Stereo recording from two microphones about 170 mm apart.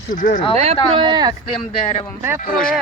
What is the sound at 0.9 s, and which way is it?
Speech, 30° right (ahead or behind).